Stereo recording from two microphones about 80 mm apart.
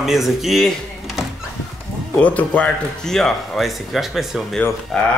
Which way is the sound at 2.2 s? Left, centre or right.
Centre.